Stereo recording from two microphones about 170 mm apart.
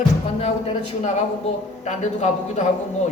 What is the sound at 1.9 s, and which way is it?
Speech, 40° left (ahead or behind).